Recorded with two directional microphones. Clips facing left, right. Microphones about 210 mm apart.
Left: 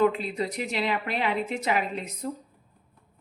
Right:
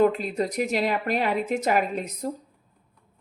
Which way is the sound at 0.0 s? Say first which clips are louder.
Right 3 dB; 45° right (ahead or behind).